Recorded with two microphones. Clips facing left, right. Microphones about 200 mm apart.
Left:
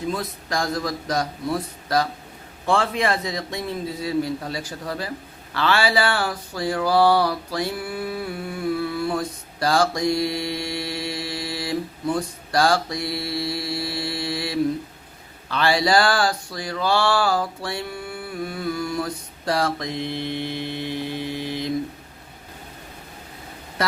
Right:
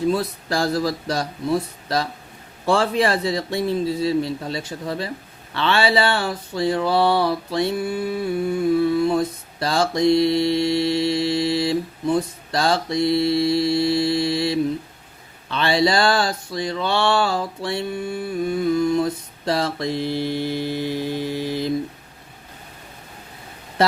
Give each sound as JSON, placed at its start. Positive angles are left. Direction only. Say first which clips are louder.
{"t": 0.1, "sound": "a man's voice", "louder": "right 5 dB", "side_deg": -30}
{"t": 2.6, "sound": "a sound", "louder": "right 3 dB", "side_deg": -35}
{"t": 9.0, "sound": "mantra", "louder": "right 6 dB", "side_deg": -20}
{"t": 15.4, "sound": "speech", "louder": "right 1 dB", "side_deg": -25}
{"t": 20.2, "sound": "mantra", "louder": "right 4 dB", "side_deg": -40}